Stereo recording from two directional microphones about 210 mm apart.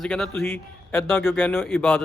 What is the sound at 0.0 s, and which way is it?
Speech, centre (ahead or behind).